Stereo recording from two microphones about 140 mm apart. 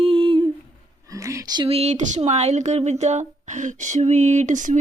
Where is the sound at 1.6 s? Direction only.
45° right (ahead or behind).